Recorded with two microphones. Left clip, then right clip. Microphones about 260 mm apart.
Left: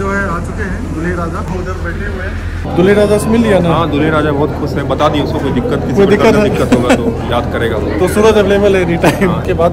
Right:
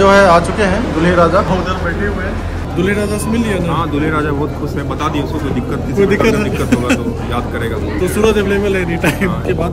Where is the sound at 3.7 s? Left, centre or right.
Centre.